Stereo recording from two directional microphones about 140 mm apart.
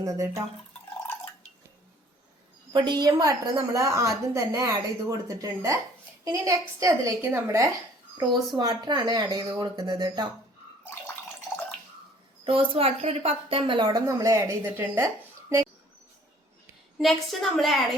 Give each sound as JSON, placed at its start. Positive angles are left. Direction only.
{"t": 0.0, "sound": "a woman's voice", "side_deg": -25}
{"t": 2.7, "sound": "a woman's voice", "side_deg": -30}
{"t": 8.5, "sound": "a woman's voice", "side_deg": -30}
{"t": 12.5, "sound": "a woman's voice", "side_deg": -40}
{"t": 17.0, "sound": "a woman's voice", "side_deg": 0}